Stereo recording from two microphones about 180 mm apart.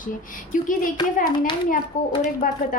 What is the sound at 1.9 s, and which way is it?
Speech, 45° left (ahead or behind).